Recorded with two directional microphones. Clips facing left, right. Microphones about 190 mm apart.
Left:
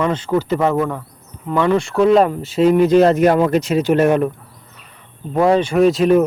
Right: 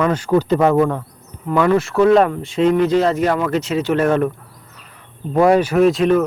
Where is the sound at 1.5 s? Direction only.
5° right (ahead or behind).